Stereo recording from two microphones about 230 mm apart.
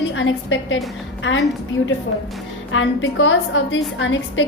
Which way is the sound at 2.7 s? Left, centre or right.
Left.